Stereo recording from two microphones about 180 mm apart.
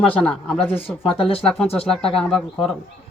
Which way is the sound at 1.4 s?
5° left (ahead or behind).